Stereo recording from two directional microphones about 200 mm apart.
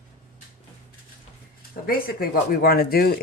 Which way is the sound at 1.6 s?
45° left (ahead or behind).